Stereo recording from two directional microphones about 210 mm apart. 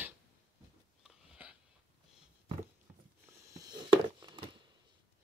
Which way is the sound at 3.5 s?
20° right (ahead or behind).